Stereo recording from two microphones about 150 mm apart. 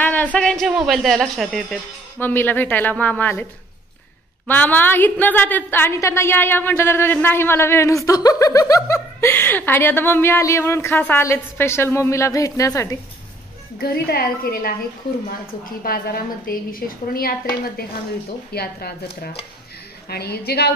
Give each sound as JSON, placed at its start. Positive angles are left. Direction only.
{"t": 0.0, "sound": "speech", "side_deg": 10}
{"t": 2.1, "sound": "a woman's voice", "side_deg": 15}
{"t": 4.5, "sound": "a woman's voice", "side_deg": 10}
{"t": 13.7, "sound": "a woman's voice", "side_deg": 90}
{"t": 15.8, "sound": "a woman's voice", "side_deg": 75}